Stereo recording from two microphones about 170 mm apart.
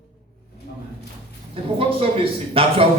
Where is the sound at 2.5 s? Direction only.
35° right (ahead or behind).